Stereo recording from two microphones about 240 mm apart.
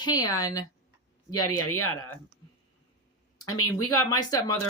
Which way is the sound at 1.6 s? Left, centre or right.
Left.